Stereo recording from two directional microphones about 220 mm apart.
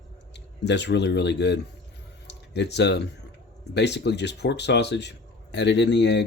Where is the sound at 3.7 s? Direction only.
50° left (ahead or behind).